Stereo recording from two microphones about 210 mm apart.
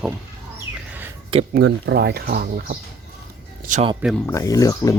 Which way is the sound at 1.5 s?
55° right (ahead or behind).